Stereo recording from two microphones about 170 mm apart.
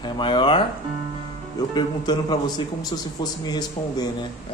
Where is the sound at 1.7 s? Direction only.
25° left (ahead or behind).